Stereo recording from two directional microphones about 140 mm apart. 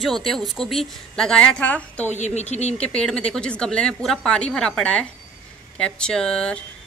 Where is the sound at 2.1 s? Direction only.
55° left (ahead or behind).